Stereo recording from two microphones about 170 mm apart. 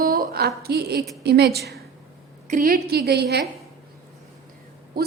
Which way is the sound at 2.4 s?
55° right (ahead or behind).